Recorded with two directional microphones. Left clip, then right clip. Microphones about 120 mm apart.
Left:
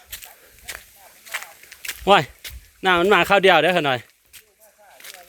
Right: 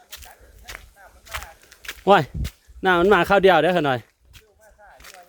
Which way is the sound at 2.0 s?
55° right (ahead or behind).